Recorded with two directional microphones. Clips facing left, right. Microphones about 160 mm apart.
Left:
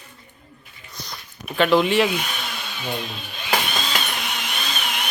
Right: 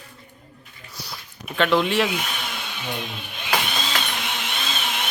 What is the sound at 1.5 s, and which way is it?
Speech, 5° left (ahead or behind).